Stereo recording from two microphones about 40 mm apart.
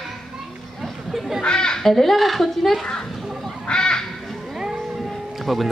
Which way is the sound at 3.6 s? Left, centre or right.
Centre.